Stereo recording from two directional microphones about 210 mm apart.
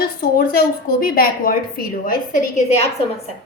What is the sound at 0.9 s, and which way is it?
A woman's voice, 45° left (ahead or behind).